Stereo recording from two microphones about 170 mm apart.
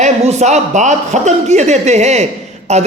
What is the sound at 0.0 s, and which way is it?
A man's voice, 40° right (ahead or behind).